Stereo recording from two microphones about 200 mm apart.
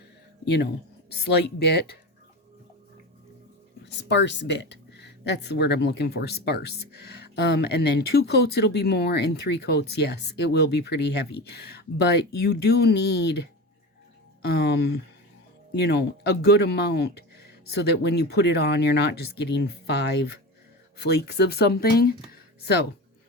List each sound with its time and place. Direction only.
0.4 s speech: 55° left (ahead or behind)
3.8 s speech: 60° left (ahead or behind)